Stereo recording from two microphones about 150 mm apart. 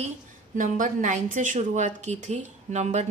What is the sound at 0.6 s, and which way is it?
Speech, 60° right (ahead or behind).